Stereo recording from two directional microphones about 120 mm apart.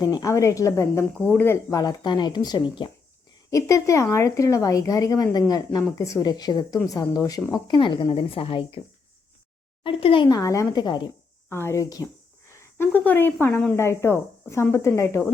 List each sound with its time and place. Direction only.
0.1 s speech: 25° left (ahead or behind)
1.2 s speech: 15° left (ahead or behind)
1.8 s speech: 35° left (ahead or behind)
3.5 s speech: 25° left (ahead or behind)
7.7 s a woman's voice: 45° left (ahead or behind)
9.8 s a woman's voice: 45° left (ahead or behind)
10.2 s speech: 30° left (ahead or behind)
11.4 s speech: 20° left (ahead or behind)